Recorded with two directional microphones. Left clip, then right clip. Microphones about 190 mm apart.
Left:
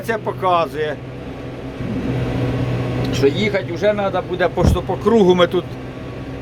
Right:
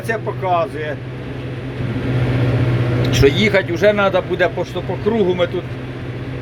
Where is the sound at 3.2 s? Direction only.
10° right (ahead or behind).